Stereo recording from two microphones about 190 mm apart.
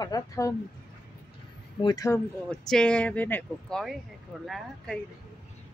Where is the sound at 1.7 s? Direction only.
20° left (ahead or behind).